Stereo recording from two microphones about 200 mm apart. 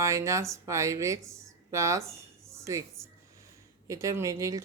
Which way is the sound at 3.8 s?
15° right (ahead or behind).